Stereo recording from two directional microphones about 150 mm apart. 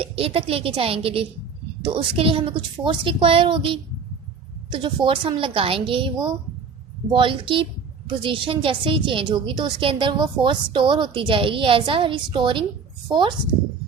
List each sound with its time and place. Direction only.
0.0 s a woman's voice: 40° right (ahead or behind)